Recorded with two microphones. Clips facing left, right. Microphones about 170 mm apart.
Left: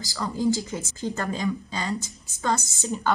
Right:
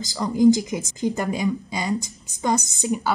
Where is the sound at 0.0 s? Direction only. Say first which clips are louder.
Right 8 dB; 20° right (ahead or behind).